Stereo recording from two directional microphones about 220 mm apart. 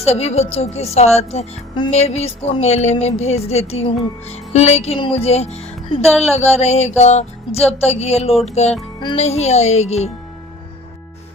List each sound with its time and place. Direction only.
0.0 s speech: 30° left (ahead or behind)